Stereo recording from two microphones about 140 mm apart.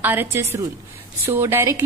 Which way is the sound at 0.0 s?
15° right (ahead or behind).